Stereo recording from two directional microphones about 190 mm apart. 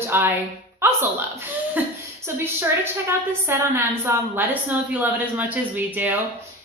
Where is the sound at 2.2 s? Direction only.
10° right (ahead or behind).